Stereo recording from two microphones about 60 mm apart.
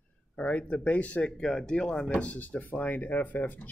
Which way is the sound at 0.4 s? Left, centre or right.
Left.